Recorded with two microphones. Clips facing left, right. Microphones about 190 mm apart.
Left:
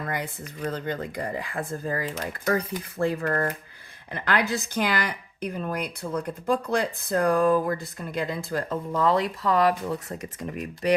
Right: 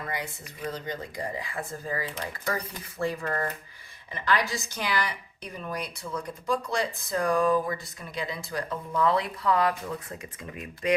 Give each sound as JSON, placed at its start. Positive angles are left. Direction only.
{"t": 0.1, "sound": "a woman's voice", "side_deg": 50}
{"t": 9.0, "sound": "speech", "side_deg": 40}